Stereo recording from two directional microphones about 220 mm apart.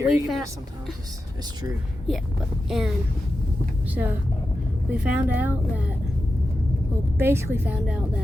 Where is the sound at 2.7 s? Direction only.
Centre (ahead or behind).